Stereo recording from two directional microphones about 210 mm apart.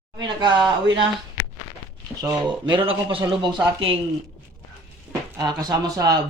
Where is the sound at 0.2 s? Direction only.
20° right (ahead or behind).